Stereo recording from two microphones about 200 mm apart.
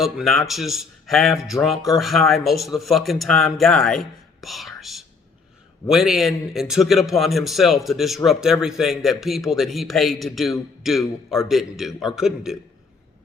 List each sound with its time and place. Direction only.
0.0 s speech: centre (ahead or behind)